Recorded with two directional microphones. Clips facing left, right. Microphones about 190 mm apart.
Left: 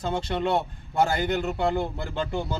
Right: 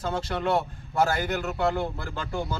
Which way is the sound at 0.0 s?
25° left (ahead or behind).